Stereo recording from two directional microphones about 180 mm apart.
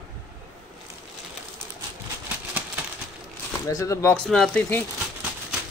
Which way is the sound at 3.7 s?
15° left (ahead or behind).